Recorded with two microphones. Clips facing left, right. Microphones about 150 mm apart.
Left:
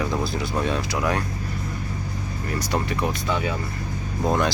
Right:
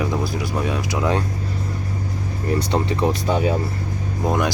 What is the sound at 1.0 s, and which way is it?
Speech, 25° right (ahead or behind).